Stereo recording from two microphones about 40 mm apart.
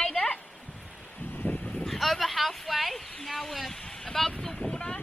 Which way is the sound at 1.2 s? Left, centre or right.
Left.